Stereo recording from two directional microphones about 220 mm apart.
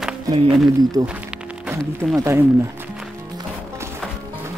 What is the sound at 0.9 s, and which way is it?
Speech, 15° right (ahead or behind).